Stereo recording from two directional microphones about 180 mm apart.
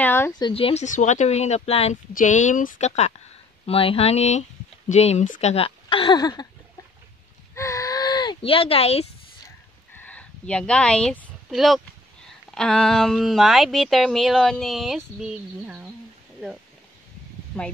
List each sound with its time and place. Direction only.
0.0 s a sound: 10° left (ahead or behind)
0.4 s speech: 30° left (ahead or behind)
0.8 s speech: 45° left (ahead or behind)
3.6 s speech: 30° left (ahead or behind)
7.5 s a sound: 15° left (ahead or behind); by 9.1 s 35° left (ahead or behind)
9.9 s speech: 10° left (ahead or behind); by 15.9 s 10° right (ahead or behind)
17.5 s speech: 5° left (ahead or behind)